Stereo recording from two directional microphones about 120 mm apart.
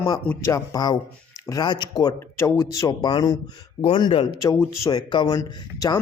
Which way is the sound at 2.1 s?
25° left (ahead or behind).